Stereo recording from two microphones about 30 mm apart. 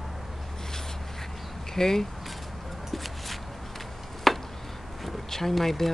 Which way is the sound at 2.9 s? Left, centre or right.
Centre.